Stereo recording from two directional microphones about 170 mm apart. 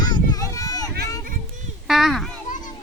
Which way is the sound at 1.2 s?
50° right (ahead or behind).